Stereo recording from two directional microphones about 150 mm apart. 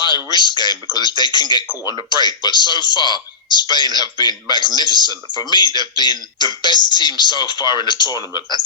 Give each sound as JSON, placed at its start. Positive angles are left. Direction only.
{"t": 0.3, "sound": "speech", "side_deg": 30}